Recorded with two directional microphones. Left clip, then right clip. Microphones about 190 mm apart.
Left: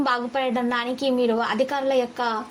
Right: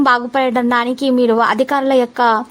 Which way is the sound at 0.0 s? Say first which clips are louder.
Right 10 dB; 40° right (ahead or behind).